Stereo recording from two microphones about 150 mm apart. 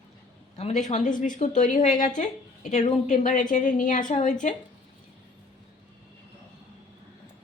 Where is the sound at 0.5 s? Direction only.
50° left (ahead or behind).